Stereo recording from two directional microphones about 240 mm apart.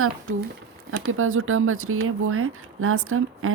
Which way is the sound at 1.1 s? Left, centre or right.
Right.